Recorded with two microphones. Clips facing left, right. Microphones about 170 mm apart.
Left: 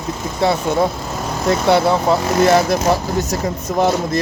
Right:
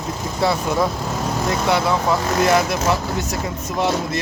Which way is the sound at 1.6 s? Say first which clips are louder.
Left 5 dB; 30° left (ahead or behind).